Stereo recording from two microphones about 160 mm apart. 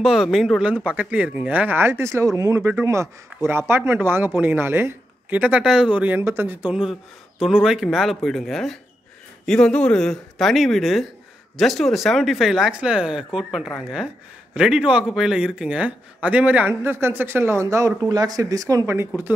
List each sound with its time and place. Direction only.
0.0 s speech: 5° right (ahead or behind)